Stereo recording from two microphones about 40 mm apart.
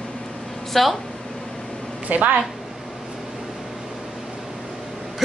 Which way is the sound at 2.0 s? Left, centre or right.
Right.